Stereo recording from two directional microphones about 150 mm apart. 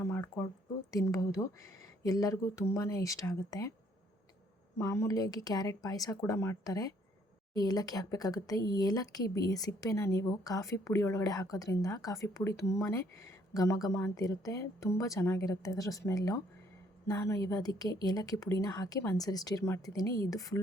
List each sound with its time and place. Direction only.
0.0 s a sound: 15° left (ahead or behind)
0.9 s speech: 25° left (ahead or behind)
4.8 s speech: 20° left (ahead or behind)